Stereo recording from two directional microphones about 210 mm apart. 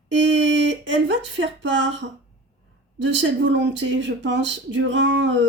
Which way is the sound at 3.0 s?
60° right (ahead or behind).